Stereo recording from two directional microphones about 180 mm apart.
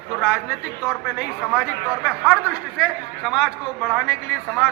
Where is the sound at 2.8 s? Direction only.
Centre (ahead or behind).